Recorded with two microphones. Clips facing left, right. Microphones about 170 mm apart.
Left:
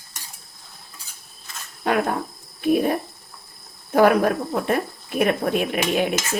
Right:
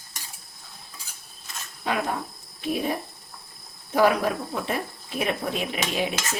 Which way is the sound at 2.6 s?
55° left (ahead or behind).